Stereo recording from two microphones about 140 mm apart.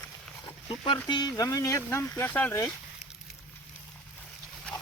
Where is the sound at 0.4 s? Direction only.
35° left (ahead or behind).